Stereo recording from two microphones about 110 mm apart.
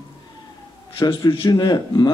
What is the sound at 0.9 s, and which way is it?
A man's voice, 50° left (ahead or behind).